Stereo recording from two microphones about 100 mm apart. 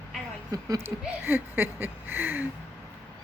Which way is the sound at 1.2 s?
20° right (ahead or behind).